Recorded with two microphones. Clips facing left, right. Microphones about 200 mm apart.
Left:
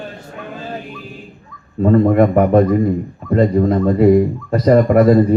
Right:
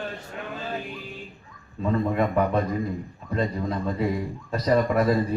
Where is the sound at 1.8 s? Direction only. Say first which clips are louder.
Left 12 dB; 60° left (ahead or behind).